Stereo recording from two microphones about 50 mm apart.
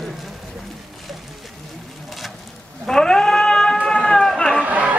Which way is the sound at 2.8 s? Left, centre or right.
Centre.